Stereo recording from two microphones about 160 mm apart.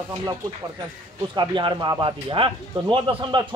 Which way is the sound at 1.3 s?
30° right (ahead or behind).